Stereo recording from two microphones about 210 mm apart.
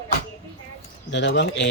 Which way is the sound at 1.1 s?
55° left (ahead or behind).